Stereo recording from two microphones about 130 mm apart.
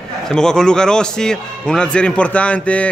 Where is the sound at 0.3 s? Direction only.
5° left (ahead or behind).